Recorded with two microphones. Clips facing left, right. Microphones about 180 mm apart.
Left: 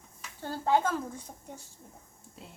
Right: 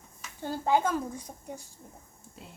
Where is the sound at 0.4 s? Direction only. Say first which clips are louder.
Right 1 dB; 15° right (ahead or behind).